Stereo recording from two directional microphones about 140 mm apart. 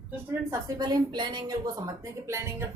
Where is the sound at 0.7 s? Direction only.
30° right (ahead or behind).